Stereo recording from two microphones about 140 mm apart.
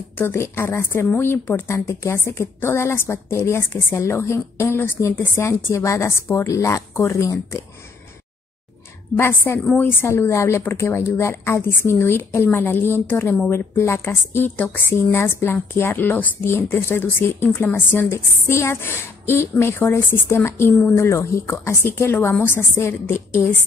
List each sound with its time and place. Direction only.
0.2 s a woman's voice: 15° left (ahead or behind)
9.1 s a woman's voice: 15° left (ahead or behind)